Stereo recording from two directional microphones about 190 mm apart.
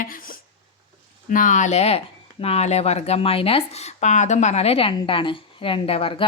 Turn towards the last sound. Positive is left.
turn(degrees=30)  # may be behind; listen again after turning